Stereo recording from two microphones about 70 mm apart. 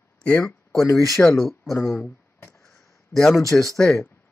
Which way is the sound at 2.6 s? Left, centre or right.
Centre.